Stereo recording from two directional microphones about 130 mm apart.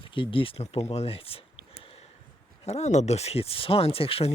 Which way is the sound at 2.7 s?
60° left (ahead or behind).